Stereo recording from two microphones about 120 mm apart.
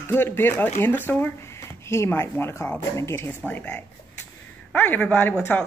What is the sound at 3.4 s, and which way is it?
A child's voice, 10° left (ahead or behind).